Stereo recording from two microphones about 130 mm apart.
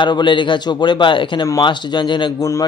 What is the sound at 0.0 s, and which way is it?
Speech, 35° left (ahead or behind).